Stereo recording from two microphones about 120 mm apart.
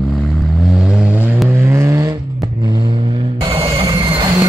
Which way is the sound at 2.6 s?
35° right (ahead or behind).